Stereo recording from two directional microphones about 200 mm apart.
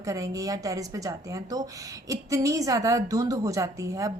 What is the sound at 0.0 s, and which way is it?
A woman's voice, 15° right (ahead or behind).